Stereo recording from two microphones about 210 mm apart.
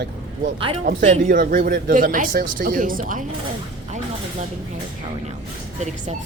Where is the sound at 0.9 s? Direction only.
40° right (ahead or behind).